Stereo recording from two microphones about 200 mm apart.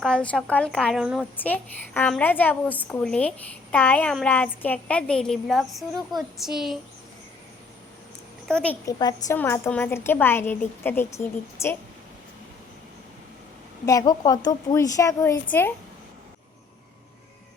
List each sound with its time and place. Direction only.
0.0 s a woman's voice: 5° left (ahead or behind)
1.4 s a woman's voice: 10° left (ahead or behind)
8.4 s a woman's voice: 5° left (ahead or behind)
8.9 s a woman's voice: 20° left (ahead or behind)
13.8 s a woman's voice: 15° left (ahead or behind)